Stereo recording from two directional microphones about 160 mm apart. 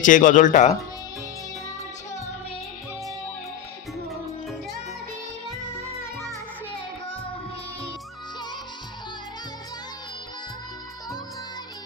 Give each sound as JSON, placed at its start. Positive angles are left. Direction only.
{"t": 0.0, "sound": "speech", "side_deg": 55}